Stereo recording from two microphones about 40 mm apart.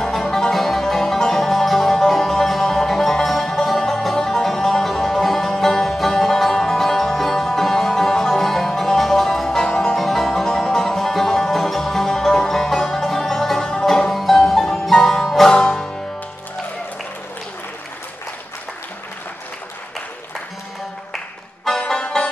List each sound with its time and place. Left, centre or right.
0.1 s music: centre
9.9 s music: centre
21.6 s banjo: centre